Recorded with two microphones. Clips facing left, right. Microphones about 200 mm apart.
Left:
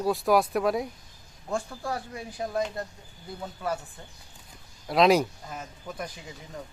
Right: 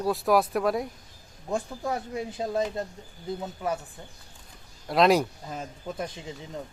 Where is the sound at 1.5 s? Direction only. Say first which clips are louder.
Right 2 dB; 20° right (ahead or behind).